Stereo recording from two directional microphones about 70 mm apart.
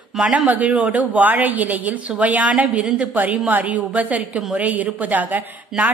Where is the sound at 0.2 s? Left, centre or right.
Right.